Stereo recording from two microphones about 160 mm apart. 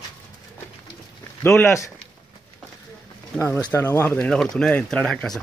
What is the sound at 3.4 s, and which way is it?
Speech, 10° left (ahead or behind).